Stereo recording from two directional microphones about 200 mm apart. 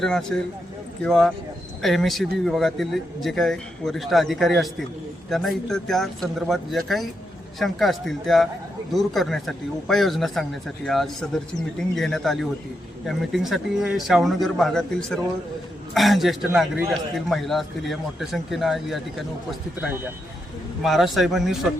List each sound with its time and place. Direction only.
0.0 s speech: 5° left (ahead or behind)
20.8 s speech: centre (ahead or behind)